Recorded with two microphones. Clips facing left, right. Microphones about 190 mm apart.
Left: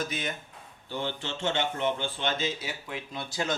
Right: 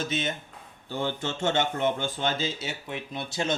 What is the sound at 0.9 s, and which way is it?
Speech, 45° right (ahead or behind).